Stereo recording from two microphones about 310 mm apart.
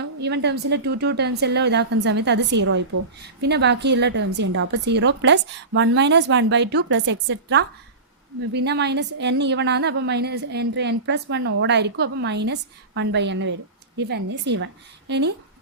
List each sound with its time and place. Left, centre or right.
0.2 s a woman's voice: right